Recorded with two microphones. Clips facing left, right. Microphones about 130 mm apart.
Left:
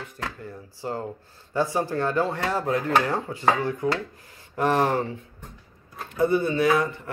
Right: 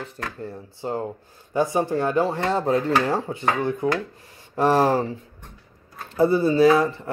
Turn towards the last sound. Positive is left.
turn(degrees=-30)  # may be behind; listen again after turning